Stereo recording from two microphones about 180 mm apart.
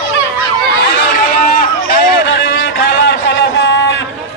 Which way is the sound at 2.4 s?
70° left (ahead or behind).